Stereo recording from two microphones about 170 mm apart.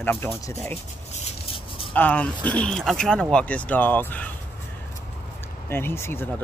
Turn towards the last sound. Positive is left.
turn(degrees=15)  # may be behind; listen again after turning